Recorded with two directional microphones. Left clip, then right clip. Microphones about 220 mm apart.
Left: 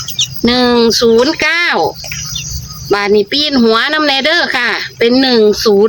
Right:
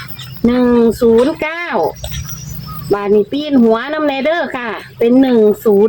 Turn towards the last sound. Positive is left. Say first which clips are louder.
# left 1 dB
turn(degrees=10)  # may be behind; listen again after turning